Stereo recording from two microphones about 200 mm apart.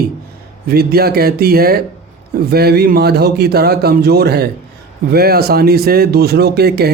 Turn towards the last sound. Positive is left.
turn(degrees=-50)  # may be behind; listen again after turning